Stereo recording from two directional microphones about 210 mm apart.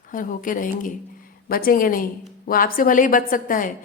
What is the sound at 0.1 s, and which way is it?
A woman's voice, 40° left (ahead or behind).